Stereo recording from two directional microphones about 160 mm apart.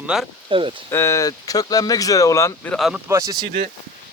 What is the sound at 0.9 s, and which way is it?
Speech, 15° left (ahead or behind).